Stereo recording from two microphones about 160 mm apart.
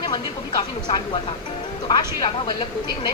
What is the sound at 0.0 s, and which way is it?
Speech, 30° left (ahead or behind).